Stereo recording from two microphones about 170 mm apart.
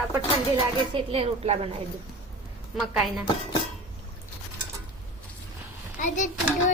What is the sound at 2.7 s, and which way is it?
Speech, centre (ahead or behind).